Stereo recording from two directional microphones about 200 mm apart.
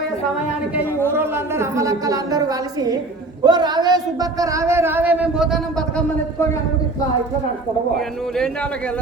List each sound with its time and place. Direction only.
1.1 s a man's voice: 10° right (ahead or behind)